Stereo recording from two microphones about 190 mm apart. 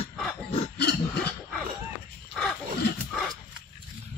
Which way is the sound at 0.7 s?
60° left (ahead or behind).